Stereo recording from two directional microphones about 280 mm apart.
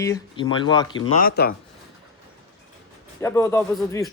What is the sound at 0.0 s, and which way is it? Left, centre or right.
Speech, centre.